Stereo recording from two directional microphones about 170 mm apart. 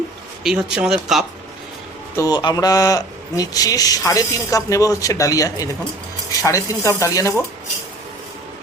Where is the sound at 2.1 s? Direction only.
20° left (ahead or behind).